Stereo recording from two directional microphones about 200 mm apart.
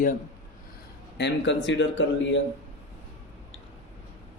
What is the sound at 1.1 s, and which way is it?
Speech, 60° left (ahead or behind).